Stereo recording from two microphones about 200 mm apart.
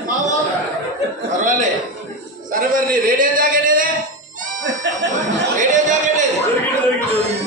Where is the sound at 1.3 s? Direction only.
40° right (ahead or behind).